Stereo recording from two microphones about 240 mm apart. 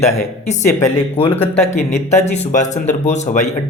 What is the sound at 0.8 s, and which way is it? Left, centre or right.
A man's voice, left.